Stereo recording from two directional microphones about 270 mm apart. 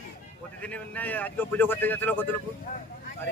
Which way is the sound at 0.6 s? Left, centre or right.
Centre.